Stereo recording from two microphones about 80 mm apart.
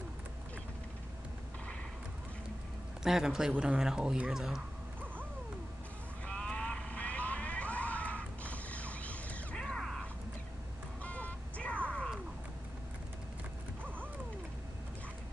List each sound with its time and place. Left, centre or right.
3.0 s speech: centre
6.2 s vehicle: centre
9.6 s mechanisms: centre
11.0 s a sound: centre